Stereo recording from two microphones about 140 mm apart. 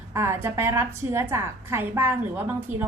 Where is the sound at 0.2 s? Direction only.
20° right (ahead or behind).